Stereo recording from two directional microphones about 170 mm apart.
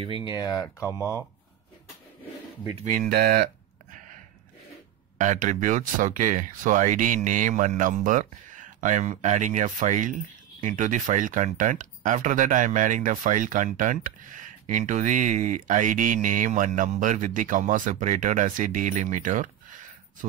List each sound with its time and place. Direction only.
0.2 s speech: 25° left (ahead or behind)
2.8 s speech: 55° right (ahead or behind)
5.1 s speech: 50° right (ahead or behind)